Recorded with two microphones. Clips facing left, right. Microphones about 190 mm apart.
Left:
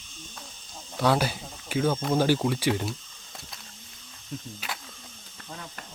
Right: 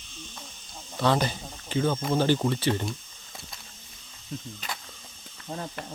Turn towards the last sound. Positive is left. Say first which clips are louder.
# right 7 dB
turn(degrees=-35)  # may be behind; listen again after turning